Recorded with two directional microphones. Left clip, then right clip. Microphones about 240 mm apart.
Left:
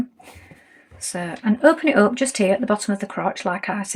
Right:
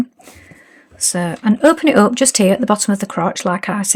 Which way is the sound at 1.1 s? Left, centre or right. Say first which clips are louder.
Right 5 dB; right.